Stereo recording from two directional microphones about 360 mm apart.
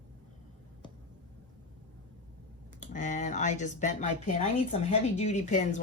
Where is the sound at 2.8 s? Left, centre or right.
Left.